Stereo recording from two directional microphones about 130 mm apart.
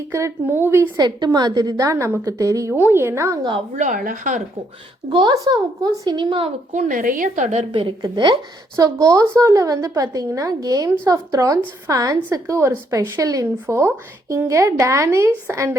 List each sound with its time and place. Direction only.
0.1 s a woman's voice: 25° right (ahead or behind)
0.9 s a woman's voice: 35° right (ahead or behind)
3.8 s a woman's voice: 85° right
5.0 s speech: 30° right (ahead or behind)
6.7 s a woman's voice: 85° right; by 7.7 s 65° right (ahead or behind)
7.7 s a woman's voice: 40° right (ahead or behind); by 15.3 s 20° right (ahead or behind)